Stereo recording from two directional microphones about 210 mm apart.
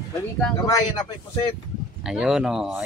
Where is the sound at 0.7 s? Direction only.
20° left (ahead or behind).